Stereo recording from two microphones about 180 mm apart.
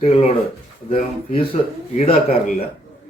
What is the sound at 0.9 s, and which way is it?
Speech, 30° left (ahead or behind).